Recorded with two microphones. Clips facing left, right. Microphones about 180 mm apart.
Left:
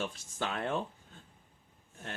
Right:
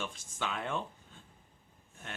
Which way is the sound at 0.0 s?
40° left (ahead or behind).